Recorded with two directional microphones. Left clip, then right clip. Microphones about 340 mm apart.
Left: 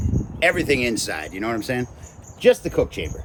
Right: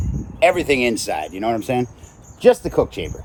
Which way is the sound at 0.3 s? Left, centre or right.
Centre.